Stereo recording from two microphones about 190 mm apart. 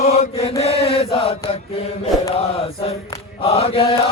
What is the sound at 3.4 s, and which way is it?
Mantra, 30° left (ahead or behind).